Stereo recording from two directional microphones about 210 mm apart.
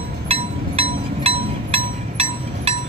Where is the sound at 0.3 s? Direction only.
30° right (ahead or behind).